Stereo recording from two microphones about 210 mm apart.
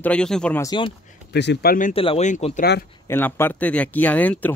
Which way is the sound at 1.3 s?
55° left (ahead or behind).